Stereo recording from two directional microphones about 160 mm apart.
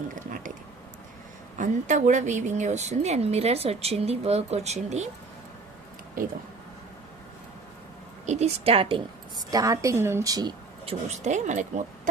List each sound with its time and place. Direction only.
0.2 s a sound: 55° right (ahead or behind)
1.5 s a woman's voice: 50° right (ahead or behind)
8.3 s a woman's voice: 40° right (ahead or behind)
9.5 s a woman's voice: 20° right (ahead or behind)
10.8 s a woman's voice: 45° right (ahead or behind)